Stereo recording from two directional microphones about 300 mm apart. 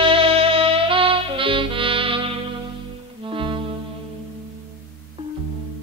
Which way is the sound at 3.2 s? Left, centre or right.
Centre.